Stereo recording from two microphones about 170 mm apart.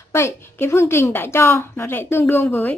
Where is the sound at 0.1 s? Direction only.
15° left (ahead or behind).